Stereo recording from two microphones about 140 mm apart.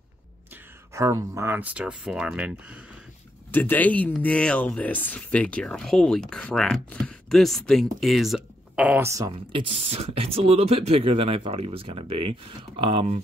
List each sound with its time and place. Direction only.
0.9 s speech: 20° right (ahead or behind)
3.5 s speech: 15° left (ahead or behind)
8.7 s speech: 10° right (ahead or behind)
9.5 s speech: 40° right (ahead or behind)